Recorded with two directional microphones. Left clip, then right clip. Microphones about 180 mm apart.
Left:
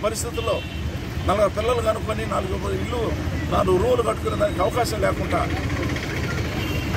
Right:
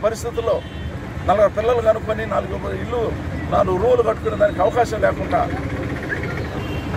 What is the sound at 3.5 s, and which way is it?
Speech, 5° right (ahead or behind).